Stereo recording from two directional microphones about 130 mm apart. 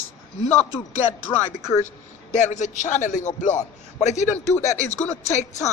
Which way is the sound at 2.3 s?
65° left (ahead or behind).